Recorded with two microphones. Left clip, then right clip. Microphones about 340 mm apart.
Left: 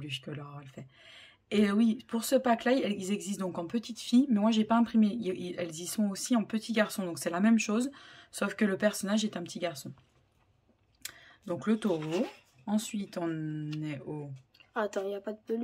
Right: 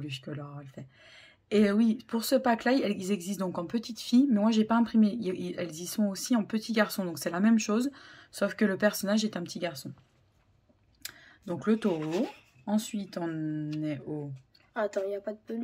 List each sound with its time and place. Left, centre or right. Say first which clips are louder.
0.0 s speech: even; centre
11.0 s clicking: right 1 dB; centre
12.6 s speech: right 2 dB; centre
14.7 s speech: right 2 dB; left